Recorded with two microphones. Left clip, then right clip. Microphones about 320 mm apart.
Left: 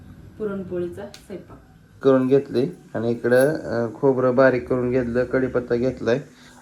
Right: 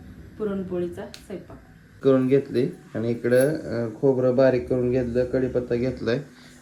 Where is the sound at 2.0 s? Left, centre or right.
Centre.